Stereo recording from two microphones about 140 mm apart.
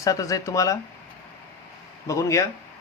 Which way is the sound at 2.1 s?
20° left (ahead or behind).